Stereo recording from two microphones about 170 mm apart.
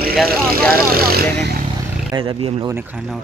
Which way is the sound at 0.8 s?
60° right (ahead or behind).